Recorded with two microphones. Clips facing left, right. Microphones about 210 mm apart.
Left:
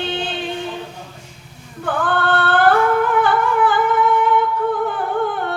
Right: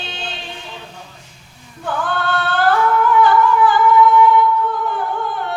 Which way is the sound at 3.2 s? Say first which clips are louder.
Right 3 dB; 55° left (ahead or behind).